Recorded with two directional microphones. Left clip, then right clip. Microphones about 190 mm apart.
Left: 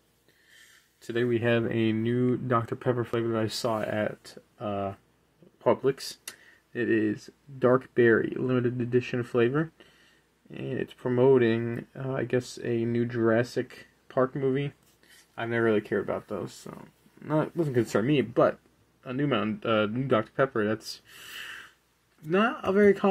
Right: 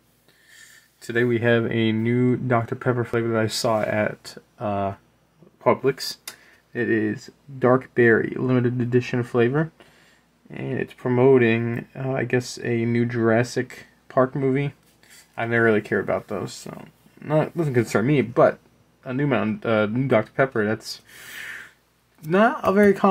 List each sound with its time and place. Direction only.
1.0 s speech: 5° right (ahead or behind); by 4.9 s 20° right (ahead or behind)
5.6 s speech: 10° right (ahead or behind)
22.3 s speech: 15° right (ahead or behind)